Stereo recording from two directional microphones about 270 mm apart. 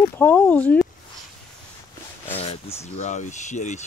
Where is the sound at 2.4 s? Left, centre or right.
Left.